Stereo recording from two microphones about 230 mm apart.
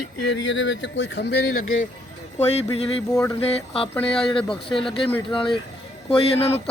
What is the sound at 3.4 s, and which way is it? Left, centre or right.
Speech, left.